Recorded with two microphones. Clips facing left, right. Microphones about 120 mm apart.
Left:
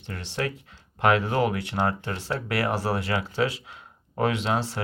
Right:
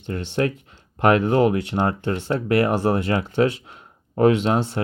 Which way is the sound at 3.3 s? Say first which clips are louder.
Right 6 dB; 30° right (ahead or behind).